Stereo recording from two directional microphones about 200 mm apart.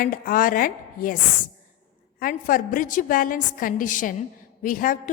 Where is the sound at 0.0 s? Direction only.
45° left (ahead or behind).